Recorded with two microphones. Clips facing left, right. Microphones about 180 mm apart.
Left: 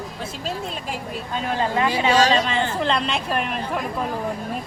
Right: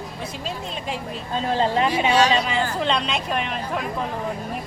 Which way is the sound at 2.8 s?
Centre (ahead or behind).